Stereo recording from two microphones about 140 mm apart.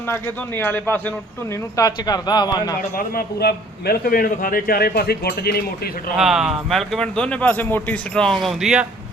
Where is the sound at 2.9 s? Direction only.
90° left.